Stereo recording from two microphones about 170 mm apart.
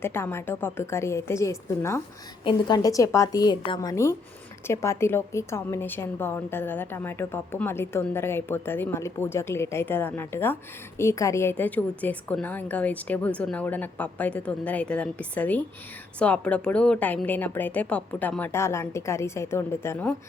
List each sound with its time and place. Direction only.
0.0 s a woman's voice: 15° left (ahead or behind)
2.4 s a woman's voice: 25° left (ahead or behind)
3.9 s a woman's voice: 15° left (ahead or behind)